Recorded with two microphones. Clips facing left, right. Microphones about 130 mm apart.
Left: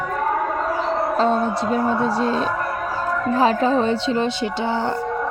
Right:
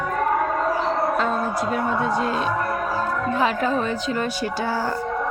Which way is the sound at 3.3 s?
35° left (ahead or behind).